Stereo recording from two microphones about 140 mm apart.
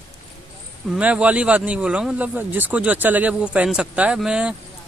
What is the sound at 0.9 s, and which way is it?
Speech, 10° right (ahead or behind).